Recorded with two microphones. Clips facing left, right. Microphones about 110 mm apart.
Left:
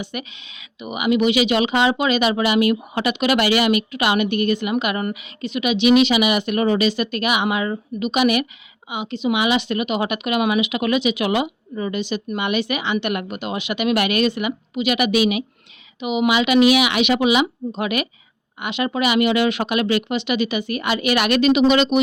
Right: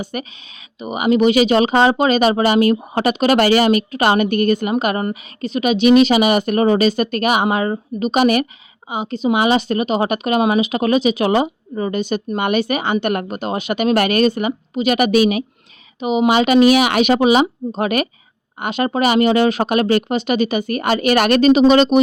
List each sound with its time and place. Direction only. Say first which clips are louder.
0.0 s a woman's voice: right 4 dB; 40° right (ahead or behind)